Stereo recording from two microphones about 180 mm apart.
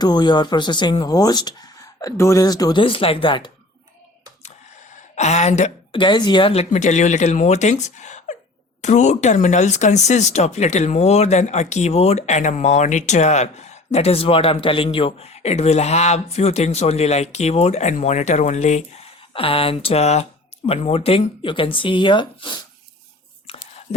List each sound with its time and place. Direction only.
0.0 s speech: 25° left (ahead or behind)
5.1 s speech: 40° left (ahead or behind)
6.0 s speech: 25° left (ahead or behind)
23.5 s a sound: 30° left (ahead or behind)